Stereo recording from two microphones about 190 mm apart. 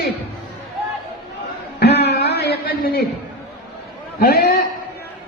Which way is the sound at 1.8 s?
60° left (ahead or behind).